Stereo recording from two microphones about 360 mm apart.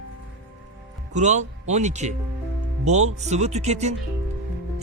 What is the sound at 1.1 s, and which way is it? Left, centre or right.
A man's voice, centre.